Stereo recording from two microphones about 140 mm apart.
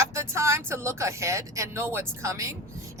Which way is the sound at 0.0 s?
20° right (ahead or behind).